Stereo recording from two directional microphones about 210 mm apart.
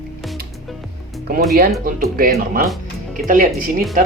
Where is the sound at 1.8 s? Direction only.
45° right (ahead or behind).